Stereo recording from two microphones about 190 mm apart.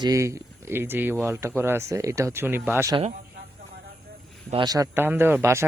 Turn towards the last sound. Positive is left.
turn(degrees=-10)  # may be behind; listen again after turning